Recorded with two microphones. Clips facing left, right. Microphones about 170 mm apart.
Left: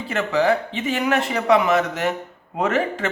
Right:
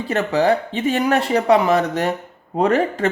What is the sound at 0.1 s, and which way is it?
Speech, 35° right (ahead or behind).